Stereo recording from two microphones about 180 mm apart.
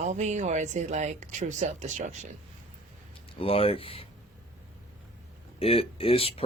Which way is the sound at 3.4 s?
30° left (ahead or behind).